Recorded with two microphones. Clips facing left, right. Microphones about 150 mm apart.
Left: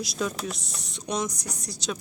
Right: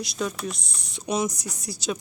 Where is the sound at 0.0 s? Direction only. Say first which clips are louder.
Right 1 dB; centre (ahead or behind).